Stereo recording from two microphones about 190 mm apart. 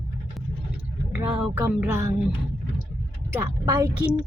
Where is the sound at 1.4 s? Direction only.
10° right (ahead or behind).